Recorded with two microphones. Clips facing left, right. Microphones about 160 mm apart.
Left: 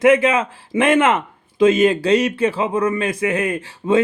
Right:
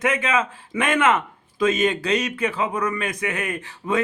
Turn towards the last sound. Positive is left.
turn(degrees=30)  # may be behind; listen again after turning